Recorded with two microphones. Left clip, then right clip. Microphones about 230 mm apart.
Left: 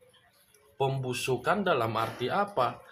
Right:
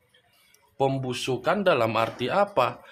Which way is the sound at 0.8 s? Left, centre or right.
Right.